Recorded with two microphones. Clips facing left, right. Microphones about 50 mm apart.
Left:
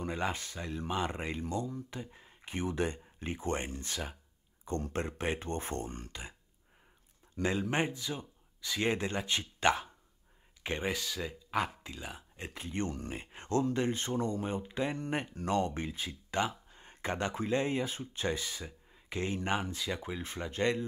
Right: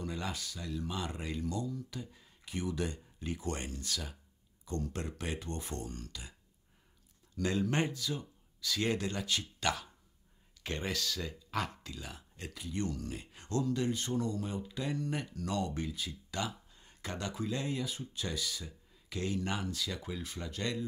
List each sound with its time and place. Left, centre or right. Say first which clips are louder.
0.0 s speech: left 4 dB; left
7.3 s speech: left 1 dB; left
12.5 s speech: left 1 dB; left